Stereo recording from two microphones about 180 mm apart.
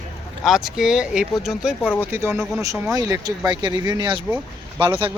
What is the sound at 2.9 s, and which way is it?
Speech, 20° right (ahead or behind).